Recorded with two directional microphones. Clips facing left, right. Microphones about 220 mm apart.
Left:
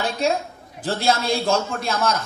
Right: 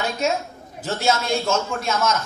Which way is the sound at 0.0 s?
35° left (ahead or behind).